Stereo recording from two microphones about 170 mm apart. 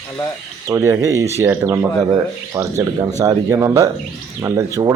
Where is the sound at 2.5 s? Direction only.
30° right (ahead or behind).